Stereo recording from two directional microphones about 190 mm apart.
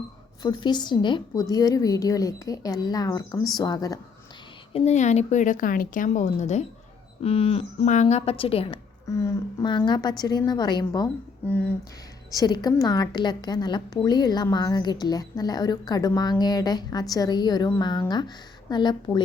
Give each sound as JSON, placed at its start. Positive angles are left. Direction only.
{"t": 0.4, "sound": "a woman's voice", "side_deg": 25}
{"t": 4.7, "sound": "speech", "side_deg": 35}
{"t": 9.0, "sound": "a woman's voice", "side_deg": 15}
{"t": 11.4, "sound": "a sound", "side_deg": 10}
{"t": 12.3, "sound": "a woman's voice", "side_deg": 20}